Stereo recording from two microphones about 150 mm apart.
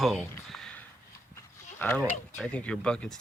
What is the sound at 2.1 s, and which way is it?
Speech, 5° left (ahead or behind).